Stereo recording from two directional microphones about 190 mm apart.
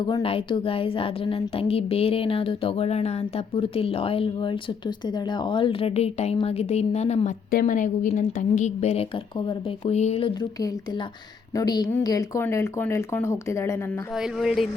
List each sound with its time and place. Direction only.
0.0 s a woman's voice: 25° left (ahead or behind)
11.5 s speech: 20° left (ahead or behind)
14.2 s speech: centre (ahead or behind)